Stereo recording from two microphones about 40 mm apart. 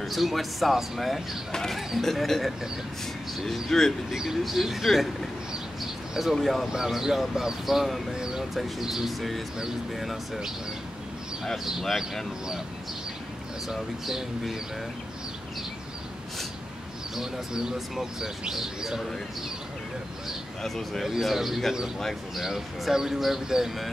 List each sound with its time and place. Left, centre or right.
0.0 s speech: centre
1.5 s speech: centre
6.3 s speech: centre
6.7 s speech: centre
8.1 s a sound: centre
8.5 s speech: centre
13.7 s speech: centre
17.1 s speech: centre
20.6 s speech: centre
21.0 s speech: centre